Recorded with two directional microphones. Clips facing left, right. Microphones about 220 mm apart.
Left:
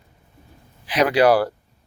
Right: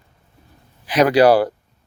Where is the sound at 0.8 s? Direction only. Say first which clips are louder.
Right 3 dB; 45° right (ahead or behind).